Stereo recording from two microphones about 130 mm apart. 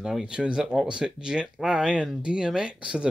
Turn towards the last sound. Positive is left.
turn(degrees=-10)  # may be behind; listen again after turning